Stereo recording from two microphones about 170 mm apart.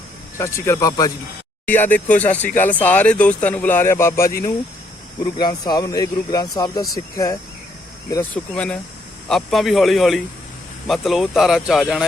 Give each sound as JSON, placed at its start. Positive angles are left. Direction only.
{"t": 0.3, "sound": "speech", "side_deg": 15}
{"t": 4.3, "sound": "speech", "side_deg": 55}
{"t": 5.2, "sound": "speech", "side_deg": 25}
{"t": 8.3, "sound": "speech", "side_deg": 5}